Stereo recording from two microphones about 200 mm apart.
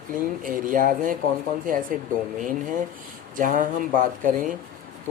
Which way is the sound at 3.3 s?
40° right (ahead or behind).